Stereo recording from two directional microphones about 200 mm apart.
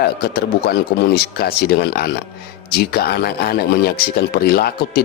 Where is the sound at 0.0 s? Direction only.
50° left (ahead or behind).